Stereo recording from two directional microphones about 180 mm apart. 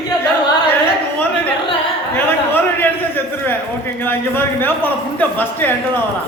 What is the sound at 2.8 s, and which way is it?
Speech, 10° left (ahead or behind).